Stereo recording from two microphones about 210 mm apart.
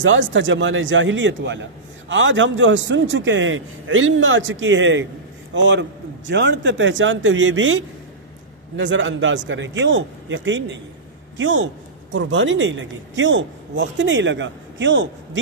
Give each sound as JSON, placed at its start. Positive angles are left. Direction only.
{"t": 0.0, "sound": "a man's voice", "side_deg": -60}